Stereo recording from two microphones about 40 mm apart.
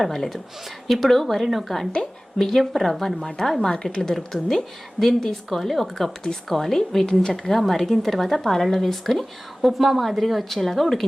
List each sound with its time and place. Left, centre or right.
0.0 s a woman's voice: centre
3.2 s a woman's voice: centre
7.0 s a woman's voice: centre
7.5 s speech: centre